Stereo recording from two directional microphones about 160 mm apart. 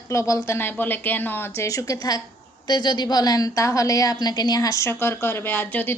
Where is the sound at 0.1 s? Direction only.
20° left (ahead or behind).